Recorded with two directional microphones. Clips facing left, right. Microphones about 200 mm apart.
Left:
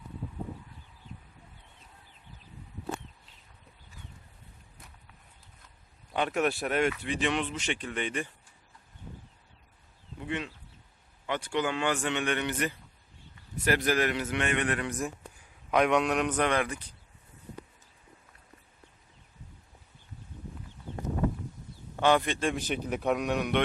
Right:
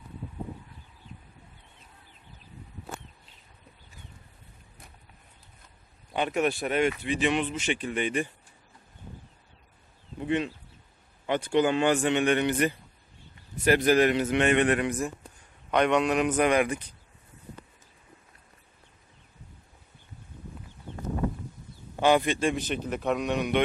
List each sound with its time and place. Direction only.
6.1 s speech: centre (ahead or behind)
10.2 s a sound: 20° right (ahead or behind)
11.3 s a man's voice: 20° right (ahead or behind)
15.7 s speech: centre (ahead or behind); by 16.8 s 15° right (ahead or behind)
21.9 s a man's voice: 10° right (ahead or behind)
22.5 s a man's voice: 10° left (ahead or behind)